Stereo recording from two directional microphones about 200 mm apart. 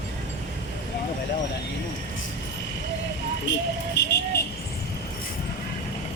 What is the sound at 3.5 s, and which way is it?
Vehicle, 60° left (ahead or behind).